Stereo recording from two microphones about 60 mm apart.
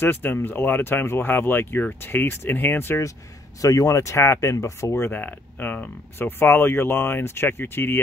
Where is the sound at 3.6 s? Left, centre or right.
Left.